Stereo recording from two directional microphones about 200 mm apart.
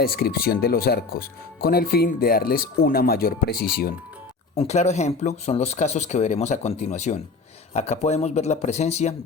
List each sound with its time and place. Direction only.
0.0 s speech: 50° left (ahead or behind)
4.5 s speech: 35° left (ahead or behind)